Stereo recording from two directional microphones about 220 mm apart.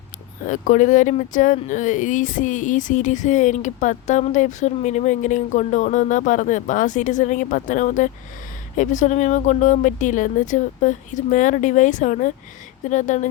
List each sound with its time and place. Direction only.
0.4 s speech: 35° left (ahead or behind)